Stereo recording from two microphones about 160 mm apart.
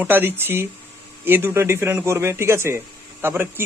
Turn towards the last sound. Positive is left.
turn(degrees=-15)  # may be behind; listen again after turning